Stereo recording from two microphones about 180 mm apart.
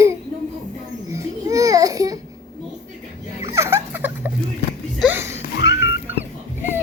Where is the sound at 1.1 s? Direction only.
20° right (ahead or behind).